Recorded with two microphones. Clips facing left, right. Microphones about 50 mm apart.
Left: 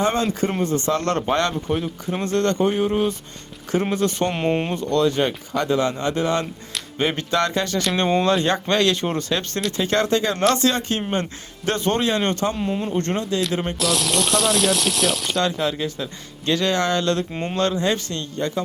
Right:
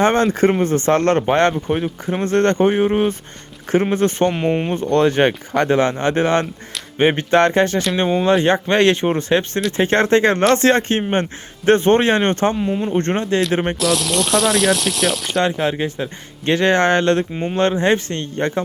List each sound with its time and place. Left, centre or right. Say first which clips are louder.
0.0 s speech: right 6 dB; right
2.2 s speech: right 5 dB; right
4.3 s speech: right 3 dB; centre
4.7 s speech: right 4 dB; right
7.9 s speech: even; centre
8.3 s speech: right 4 dB; right
12.5 s speech: right 4 dB; centre
12.9 s speech: right 5 dB; right
13.7 s speech: right 3 dB; centre
15.4 s speech: right 5 dB; right